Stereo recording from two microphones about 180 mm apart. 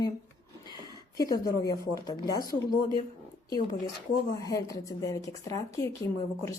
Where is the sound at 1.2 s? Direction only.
20° left (ahead or behind).